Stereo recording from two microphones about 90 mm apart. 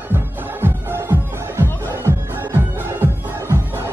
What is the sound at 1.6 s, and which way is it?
Music, 25° right (ahead or behind).